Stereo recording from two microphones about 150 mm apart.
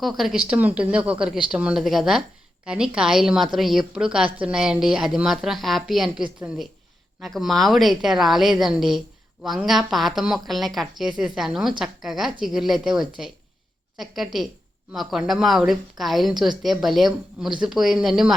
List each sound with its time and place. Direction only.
0.0 s a woman's voice: centre (ahead or behind)